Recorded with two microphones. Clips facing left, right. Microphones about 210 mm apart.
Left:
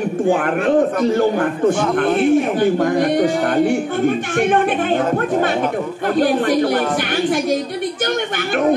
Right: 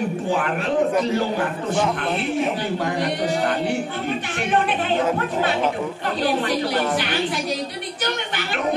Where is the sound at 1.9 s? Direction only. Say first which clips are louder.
Left 9 dB; 50° left (ahead or behind).